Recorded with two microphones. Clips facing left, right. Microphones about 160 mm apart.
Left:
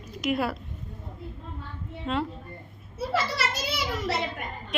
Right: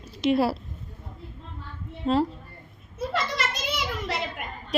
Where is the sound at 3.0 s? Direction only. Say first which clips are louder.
Even; 5° left (ahead or behind).